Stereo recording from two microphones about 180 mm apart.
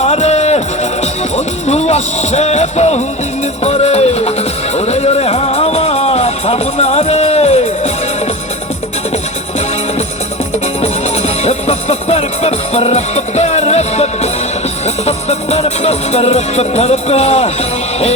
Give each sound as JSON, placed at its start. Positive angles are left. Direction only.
{"t": 0.0, "sound": "music", "side_deg": 40}
{"t": 1.6, "sound": "speech", "side_deg": 35}
{"t": 3.6, "sound": "music", "side_deg": 35}
{"t": 11.4, "sound": "music", "side_deg": 35}